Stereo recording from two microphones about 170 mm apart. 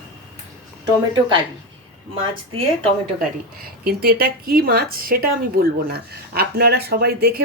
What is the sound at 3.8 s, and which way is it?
Speech, 65° right (ahead or behind).